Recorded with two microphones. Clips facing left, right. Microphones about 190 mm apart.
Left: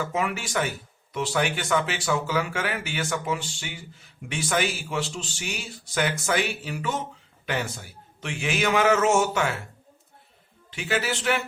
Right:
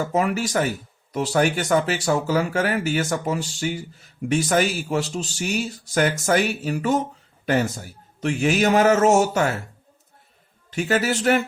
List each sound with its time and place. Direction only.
0.0 s speech: 40° right (ahead or behind)
10.7 s speech: 45° right (ahead or behind)